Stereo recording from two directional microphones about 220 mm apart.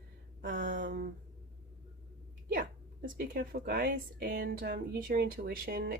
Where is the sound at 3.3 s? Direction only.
40° right (ahead or behind).